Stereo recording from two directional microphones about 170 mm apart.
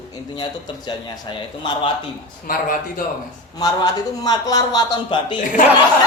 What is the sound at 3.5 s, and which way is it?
A man's voice, 20° left (ahead or behind).